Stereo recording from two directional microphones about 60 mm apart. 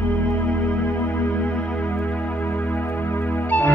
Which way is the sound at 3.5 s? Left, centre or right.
Left.